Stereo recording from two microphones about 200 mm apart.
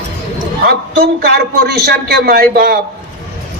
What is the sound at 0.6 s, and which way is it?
A man's voice, 50° right (ahead or behind).